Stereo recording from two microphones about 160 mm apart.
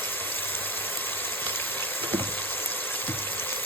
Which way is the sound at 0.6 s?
10° left (ahead or behind).